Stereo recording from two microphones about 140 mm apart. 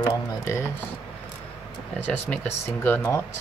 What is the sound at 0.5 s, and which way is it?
Speech, 20° left (ahead or behind).